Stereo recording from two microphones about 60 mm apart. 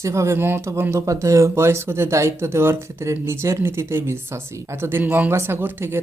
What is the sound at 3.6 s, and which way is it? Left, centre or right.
Speech, right.